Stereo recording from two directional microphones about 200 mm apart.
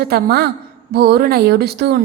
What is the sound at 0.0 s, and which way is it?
A woman's voice, 50° right (ahead or behind).